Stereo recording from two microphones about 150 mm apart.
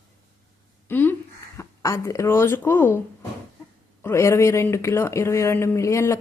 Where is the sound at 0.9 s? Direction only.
15° left (ahead or behind).